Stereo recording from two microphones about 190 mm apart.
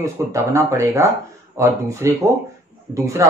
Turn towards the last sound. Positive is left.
turn(degrees=-15)  # may be behind; listen again after turning